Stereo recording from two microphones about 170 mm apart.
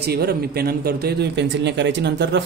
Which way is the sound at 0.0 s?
65° right (ahead or behind).